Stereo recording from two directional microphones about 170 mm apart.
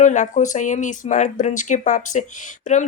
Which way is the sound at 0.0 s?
45° left (ahead or behind).